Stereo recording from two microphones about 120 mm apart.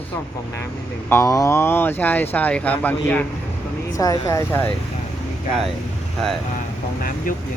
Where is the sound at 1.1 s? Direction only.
25° left (ahead or behind).